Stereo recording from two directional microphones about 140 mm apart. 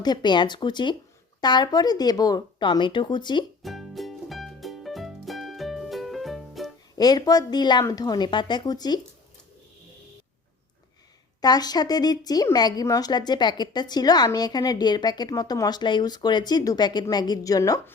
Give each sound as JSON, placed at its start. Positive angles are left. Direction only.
{"t": 0.0, "sound": "speech", "side_deg": 30}
{"t": 3.6, "sound": "music", "side_deg": 0}
{"t": 6.9, "sound": "a woman's voice", "side_deg": 30}
{"t": 11.3, "sound": "a woman's voice", "side_deg": 30}